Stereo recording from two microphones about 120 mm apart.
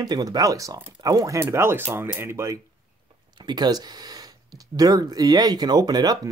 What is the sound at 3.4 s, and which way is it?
Speech, 35° right (ahead or behind).